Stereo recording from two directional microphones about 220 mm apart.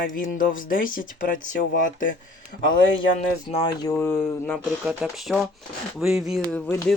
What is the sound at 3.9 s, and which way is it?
Speech, 10° left (ahead or behind).